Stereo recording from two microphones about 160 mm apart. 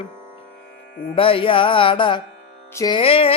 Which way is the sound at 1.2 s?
35° left (ahead or behind).